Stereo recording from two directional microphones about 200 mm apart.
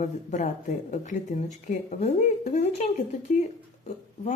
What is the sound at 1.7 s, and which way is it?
A woman's voice, 35° left (ahead or behind).